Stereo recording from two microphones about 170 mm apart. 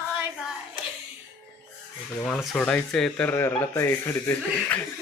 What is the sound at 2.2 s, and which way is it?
Speech, centre (ahead or behind).